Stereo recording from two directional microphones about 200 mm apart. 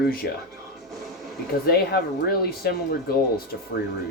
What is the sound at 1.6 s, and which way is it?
Speech, 50° left (ahead or behind).